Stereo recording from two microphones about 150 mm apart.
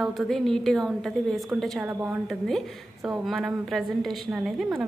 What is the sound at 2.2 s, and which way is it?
A woman's voice, centre (ahead or behind).